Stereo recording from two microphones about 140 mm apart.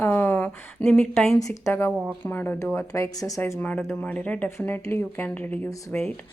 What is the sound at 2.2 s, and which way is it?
A woman's voice, 15° left (ahead or behind).